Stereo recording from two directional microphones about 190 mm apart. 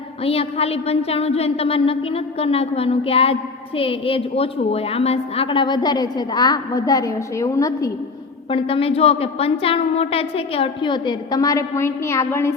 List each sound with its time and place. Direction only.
0.3 s a woman's voice: 30° left (ahead or behind)
8.4 s a woman's voice: 30° left (ahead or behind)